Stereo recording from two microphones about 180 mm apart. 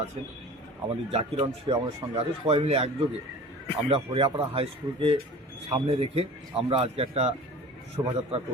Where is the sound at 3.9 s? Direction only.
30° right (ahead or behind).